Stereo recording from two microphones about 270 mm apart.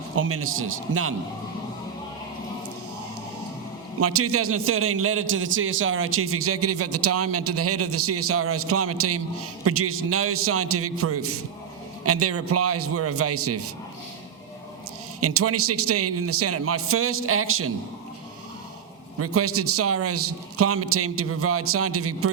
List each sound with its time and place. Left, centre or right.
0.2 s a man's voice: right
4.0 s a man's voice: right
15.2 s a man's voice: right
19.2 s a man's voice: right